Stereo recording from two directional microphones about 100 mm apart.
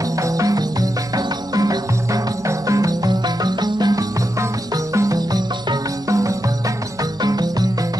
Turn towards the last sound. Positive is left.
turn(degrees=-40)  # may be behind; listen again after turning